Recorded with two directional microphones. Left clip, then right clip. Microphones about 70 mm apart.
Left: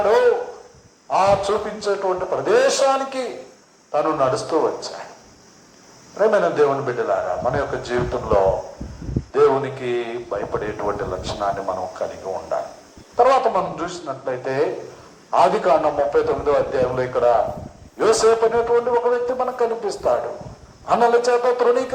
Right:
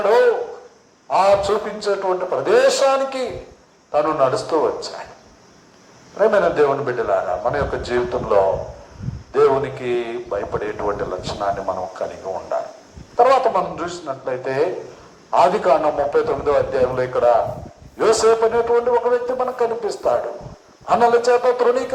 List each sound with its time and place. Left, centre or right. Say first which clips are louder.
1.1 s a man's voice: right 2 dB; right
6.1 s a man's voice: right 1 dB; right